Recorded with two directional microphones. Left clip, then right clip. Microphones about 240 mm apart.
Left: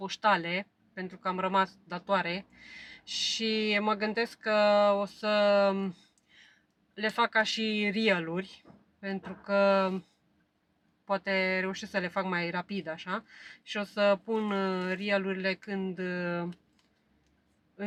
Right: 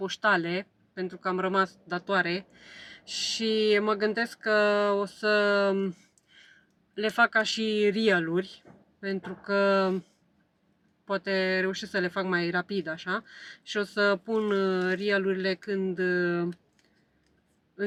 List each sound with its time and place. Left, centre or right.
0.1 s speech: centre
2.9 s a sound: left
3.2 s speech: centre
6.9 s speech: centre
11.0 s speech: centre